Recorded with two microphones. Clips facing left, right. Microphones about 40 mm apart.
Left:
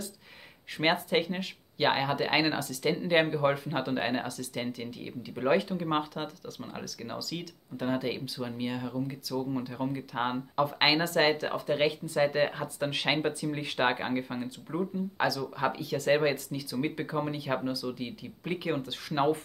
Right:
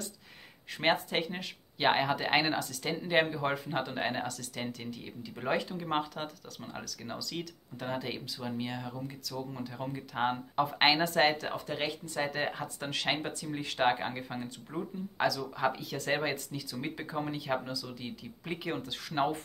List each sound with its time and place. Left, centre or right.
0.7 s speech: centre